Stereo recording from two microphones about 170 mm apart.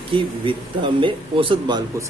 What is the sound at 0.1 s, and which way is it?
Speech, 30° right (ahead or behind).